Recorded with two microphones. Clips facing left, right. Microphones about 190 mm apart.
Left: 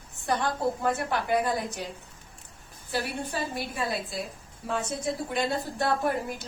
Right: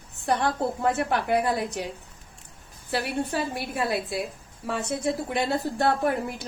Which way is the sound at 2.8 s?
65° right (ahead or behind).